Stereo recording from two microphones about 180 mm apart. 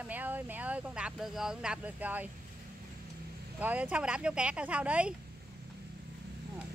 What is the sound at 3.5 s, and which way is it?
Speech, 10° right (ahead or behind).